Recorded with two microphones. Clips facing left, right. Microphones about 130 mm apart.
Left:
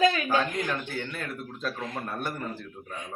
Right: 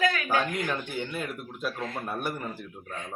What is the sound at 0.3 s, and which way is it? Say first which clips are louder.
Speech: left 1 dB; 15° right (ahead or behind).